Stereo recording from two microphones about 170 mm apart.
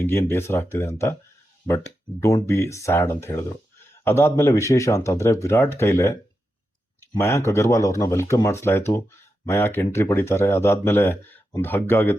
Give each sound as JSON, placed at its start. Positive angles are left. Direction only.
{"t": 0.0, "sound": "speech", "side_deg": 15}
{"t": 2.2, "sound": "speech", "side_deg": 15}